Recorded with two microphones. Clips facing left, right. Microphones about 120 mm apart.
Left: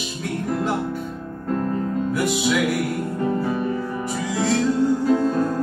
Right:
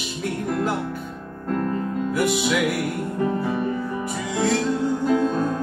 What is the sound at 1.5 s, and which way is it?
Music, 20° left (ahead or behind).